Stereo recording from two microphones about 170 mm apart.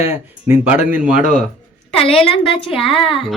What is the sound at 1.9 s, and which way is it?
A woman's voice, 35° left (ahead or behind).